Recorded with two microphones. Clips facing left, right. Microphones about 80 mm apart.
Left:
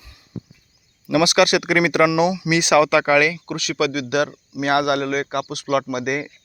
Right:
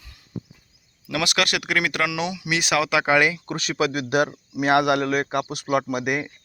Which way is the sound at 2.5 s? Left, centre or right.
Centre.